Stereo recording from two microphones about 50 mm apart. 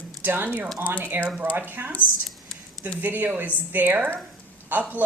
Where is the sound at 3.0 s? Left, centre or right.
Right.